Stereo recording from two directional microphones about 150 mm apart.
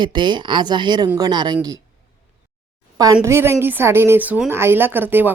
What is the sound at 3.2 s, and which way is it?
A woman's voice, 15° right (ahead or behind).